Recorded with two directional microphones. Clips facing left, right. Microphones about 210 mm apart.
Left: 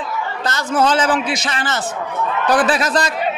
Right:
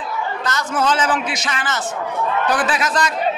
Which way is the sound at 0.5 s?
30° left (ahead or behind).